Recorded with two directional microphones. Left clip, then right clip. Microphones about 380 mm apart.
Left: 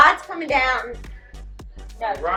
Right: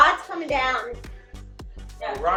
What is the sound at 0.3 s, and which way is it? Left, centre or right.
Music, centre.